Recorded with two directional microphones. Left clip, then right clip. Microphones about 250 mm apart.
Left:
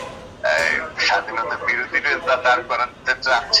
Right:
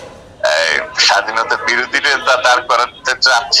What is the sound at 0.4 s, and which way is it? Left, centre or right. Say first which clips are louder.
A man's voice: right 5 dB; right.